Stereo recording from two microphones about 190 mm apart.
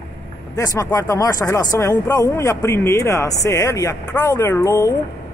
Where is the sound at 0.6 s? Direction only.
15° left (ahead or behind).